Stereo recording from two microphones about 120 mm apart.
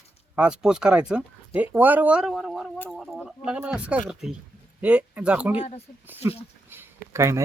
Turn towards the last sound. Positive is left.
turn(degrees=-25)  # may be behind; listen again after turning